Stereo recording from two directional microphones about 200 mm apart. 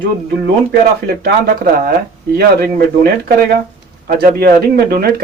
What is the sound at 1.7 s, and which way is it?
Speech, 45° right (ahead or behind).